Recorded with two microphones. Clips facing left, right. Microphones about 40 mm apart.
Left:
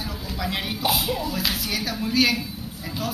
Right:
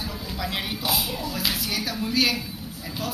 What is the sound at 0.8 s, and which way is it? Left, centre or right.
Speech, centre.